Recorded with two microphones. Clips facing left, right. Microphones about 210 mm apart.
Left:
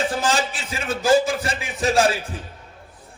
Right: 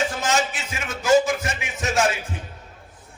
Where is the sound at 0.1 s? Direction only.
30° left (ahead or behind).